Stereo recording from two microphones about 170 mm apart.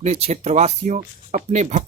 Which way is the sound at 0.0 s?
40° right (ahead or behind).